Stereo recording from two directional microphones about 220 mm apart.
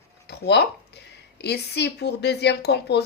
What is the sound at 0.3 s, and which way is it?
Speech, 50° left (ahead or behind).